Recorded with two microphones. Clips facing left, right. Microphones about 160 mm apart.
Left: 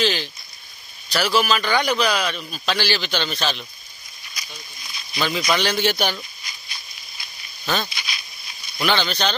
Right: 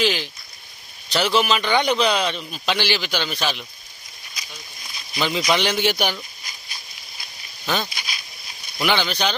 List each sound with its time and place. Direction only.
0.0 s a man's voice: 15° right (ahead or behind)
5.1 s speech: 20° right (ahead or behind)
7.6 s speech: 15° right (ahead or behind)
7.9 s a sound: 45° right (ahead or behind)
8.7 s speech: 15° right (ahead or behind)